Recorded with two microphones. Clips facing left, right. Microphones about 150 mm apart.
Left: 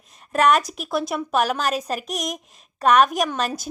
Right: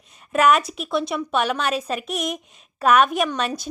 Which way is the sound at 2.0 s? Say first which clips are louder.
Right 2 dB; 40° left (ahead or behind).